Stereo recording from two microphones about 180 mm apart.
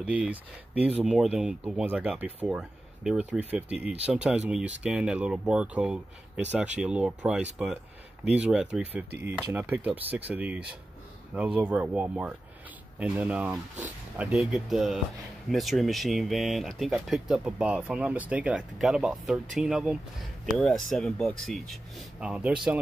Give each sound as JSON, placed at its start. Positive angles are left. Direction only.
{"t": 0.0, "sound": "speech", "side_deg": -5}